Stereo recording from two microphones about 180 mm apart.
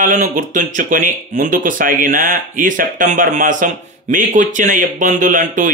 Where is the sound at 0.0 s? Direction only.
45° right (ahead or behind).